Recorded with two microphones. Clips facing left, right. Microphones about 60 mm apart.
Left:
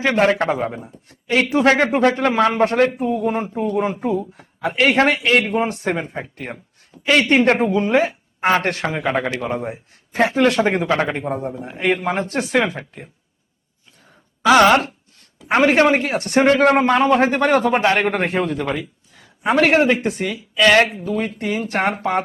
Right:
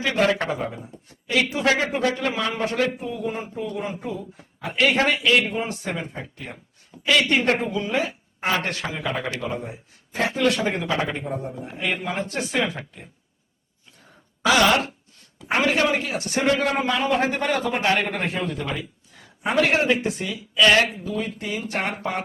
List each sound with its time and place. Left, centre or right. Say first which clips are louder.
0.0 s a man's voice: left 5 dB; left
5.5 s a man's voice: left 7 dB; left
11.3 s a man's voice: left 6 dB; left
11.6 s a man's voice: left 9 dB; left
14.5 s a man's voice: left 7 dB; left